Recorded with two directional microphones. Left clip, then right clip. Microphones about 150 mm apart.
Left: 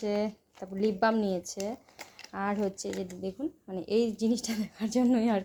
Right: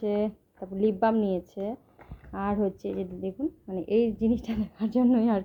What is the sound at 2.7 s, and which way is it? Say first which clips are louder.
Speech: right 3 dB; 50° left (ahead or behind).